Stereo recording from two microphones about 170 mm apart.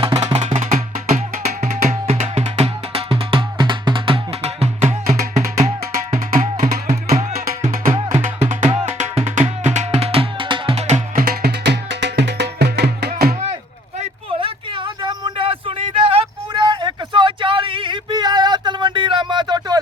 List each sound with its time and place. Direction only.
0.0 s music: 35° right (ahead or behind)
5.0 s music: 50° right (ahead or behind)
8.7 s music: 40° right (ahead or behind)
11.3 s music: 70° right (ahead or behind)
14.0 s a sound: 30° right (ahead or behind)